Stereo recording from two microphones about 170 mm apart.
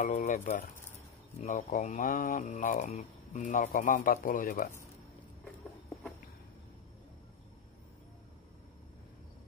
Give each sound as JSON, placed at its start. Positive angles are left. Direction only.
{"t": 0.0, "sound": "speech", "side_deg": 50}